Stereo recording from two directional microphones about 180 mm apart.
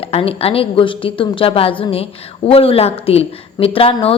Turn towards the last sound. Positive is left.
turn(degrees=30)  # may be behind; listen again after turning